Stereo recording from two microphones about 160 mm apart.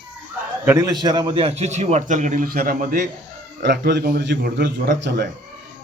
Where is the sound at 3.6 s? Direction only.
90° right.